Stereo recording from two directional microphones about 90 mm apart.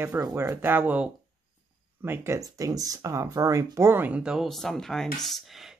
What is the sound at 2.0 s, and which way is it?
Speech, 25° right (ahead or behind).